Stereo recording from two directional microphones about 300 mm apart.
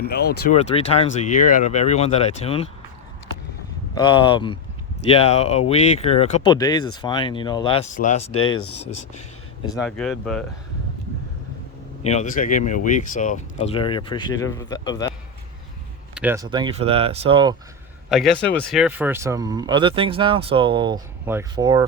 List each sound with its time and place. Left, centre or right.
0.0 s speech: left
0.6 s speech: centre
3.9 s speech: centre
9.7 s speech: centre
12.0 s speech: left
16.1 s speech: centre
18.1 s speech: centre